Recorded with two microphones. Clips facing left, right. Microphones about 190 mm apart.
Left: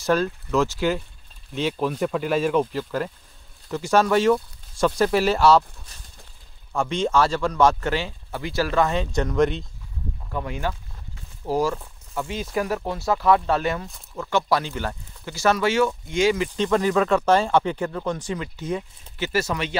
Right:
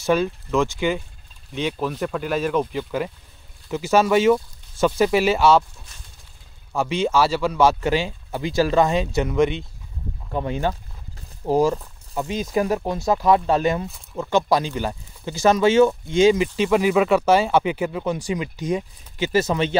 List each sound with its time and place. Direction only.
0.0 s speech: centre (ahead or behind)
6.7 s speech: 5° right (ahead or behind)
10.3 s speech: 25° right (ahead or behind)
16.5 s speech: 10° right (ahead or behind); by 19.8 s 25° right (ahead or behind)